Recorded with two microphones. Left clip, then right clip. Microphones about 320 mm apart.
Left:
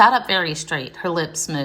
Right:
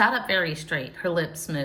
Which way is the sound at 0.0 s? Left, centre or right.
Centre.